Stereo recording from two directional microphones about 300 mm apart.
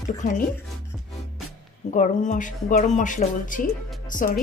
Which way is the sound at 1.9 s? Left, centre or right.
Left.